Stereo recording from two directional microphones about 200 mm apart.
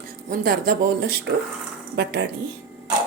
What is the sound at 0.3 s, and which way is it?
A woman's voice, 45° right (ahead or behind).